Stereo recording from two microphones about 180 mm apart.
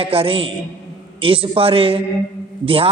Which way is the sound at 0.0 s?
30° right (ahead or behind).